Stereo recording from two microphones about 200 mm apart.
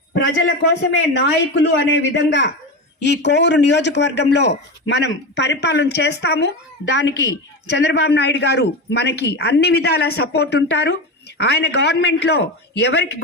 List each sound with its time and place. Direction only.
0.1 s a man's voice: 55° left (ahead or behind)